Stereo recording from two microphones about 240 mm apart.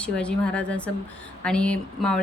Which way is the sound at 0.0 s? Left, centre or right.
Centre.